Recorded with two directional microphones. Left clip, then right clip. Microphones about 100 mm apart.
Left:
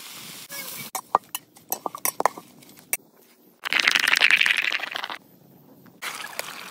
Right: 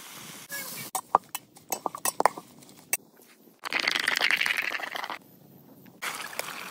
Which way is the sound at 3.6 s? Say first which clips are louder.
Left 7 dB; 20° left (ahead or behind).